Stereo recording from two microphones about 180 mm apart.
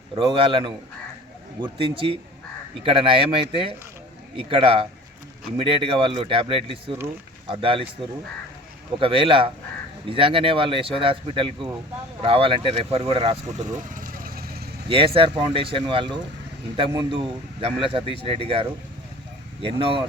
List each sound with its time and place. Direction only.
0.2 s a man's voice: 30° right (ahead or behind)
9.0 s speech: 30° right (ahead or behind); by 14.7 s 60° right (ahead or behind)
14.8 s a man's voice: 30° right (ahead or behind)